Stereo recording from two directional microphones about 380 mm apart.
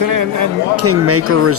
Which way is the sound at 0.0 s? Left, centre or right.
Right.